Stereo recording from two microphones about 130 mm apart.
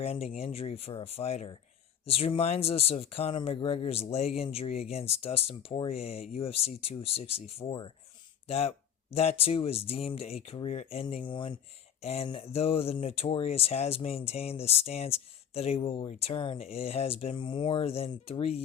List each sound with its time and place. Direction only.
0.0 s speech: 50° left (ahead or behind)
11.1 s speech: 40° left (ahead or behind)
12.0 s speech: 50° left (ahead or behind)